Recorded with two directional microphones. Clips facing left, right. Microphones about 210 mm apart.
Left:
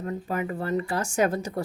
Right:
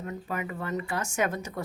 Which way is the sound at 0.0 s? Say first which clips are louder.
Left 5 dB; 35° left (ahead or behind).